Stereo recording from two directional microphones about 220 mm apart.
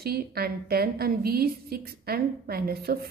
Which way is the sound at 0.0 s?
45° right (ahead or behind).